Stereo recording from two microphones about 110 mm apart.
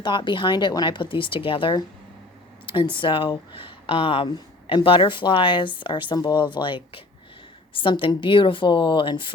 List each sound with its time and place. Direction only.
0.0 s speech: 45° left (ahead or behind)